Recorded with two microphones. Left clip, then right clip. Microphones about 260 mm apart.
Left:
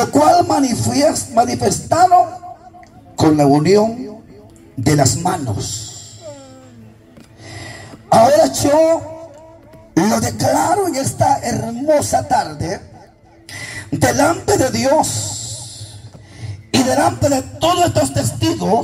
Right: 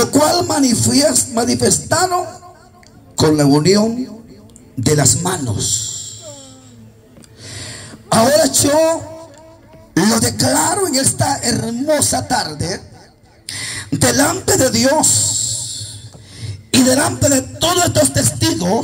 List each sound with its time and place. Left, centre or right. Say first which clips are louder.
0.0 s speech: left 2 dB; right
7.4 s a sound: right 1 dB; right
9.9 s speech: right 1 dB; right